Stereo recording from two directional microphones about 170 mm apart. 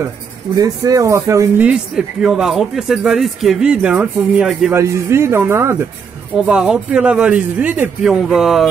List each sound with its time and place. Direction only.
0.6 s speech: 20° right (ahead or behind)
1.6 s speech: 5° right (ahead or behind)
4.7 s speech: 15° right (ahead or behind)
6.3 s speech: 5° right (ahead or behind)